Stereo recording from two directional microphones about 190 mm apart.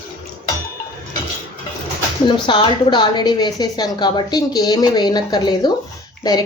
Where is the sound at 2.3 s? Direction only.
25° left (ahead or behind).